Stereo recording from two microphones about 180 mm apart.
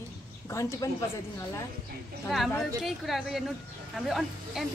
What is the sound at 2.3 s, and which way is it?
A woman's voice, centre (ahead or behind).